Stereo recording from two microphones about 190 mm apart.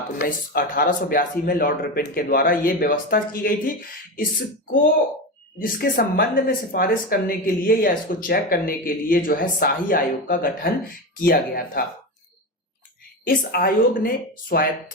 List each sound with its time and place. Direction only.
0.2 s speech: 45° left (ahead or behind)
5.5 s speech: 45° left (ahead or behind)
13.2 s speech: 50° left (ahead or behind)